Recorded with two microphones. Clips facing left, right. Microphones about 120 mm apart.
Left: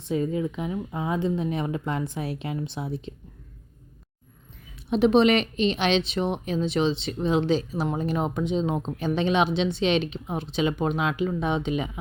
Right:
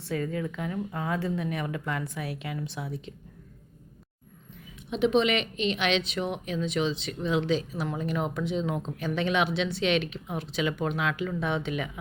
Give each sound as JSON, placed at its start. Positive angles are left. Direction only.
{"t": 0.1, "sound": "speech", "side_deg": 20}
{"t": 4.9, "sound": "a woman's voice", "side_deg": 40}